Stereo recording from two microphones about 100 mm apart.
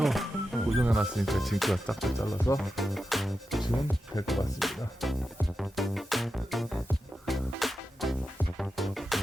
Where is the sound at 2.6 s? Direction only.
Centre (ahead or behind).